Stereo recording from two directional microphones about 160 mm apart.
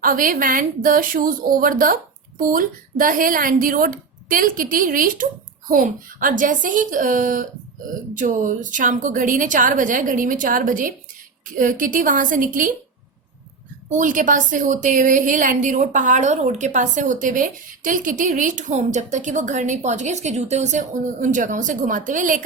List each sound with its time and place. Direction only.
0.0 s speech: 60° right (ahead or behind)
13.9 s a woman's voice: 55° right (ahead or behind)